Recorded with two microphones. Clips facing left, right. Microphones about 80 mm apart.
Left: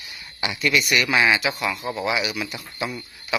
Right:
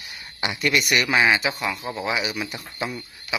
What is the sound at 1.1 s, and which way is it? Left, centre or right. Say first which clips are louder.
Speech: even; centre.